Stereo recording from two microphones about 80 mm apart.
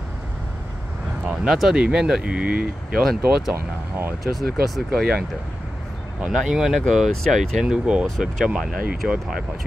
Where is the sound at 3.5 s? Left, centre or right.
Right.